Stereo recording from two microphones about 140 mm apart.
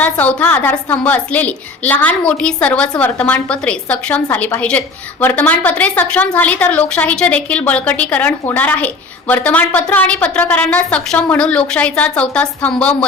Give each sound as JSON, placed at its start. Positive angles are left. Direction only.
{"t": 0.0, "sound": "a woman's voice", "side_deg": 10}